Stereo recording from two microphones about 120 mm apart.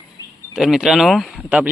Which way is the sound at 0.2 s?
30° left (ahead or behind).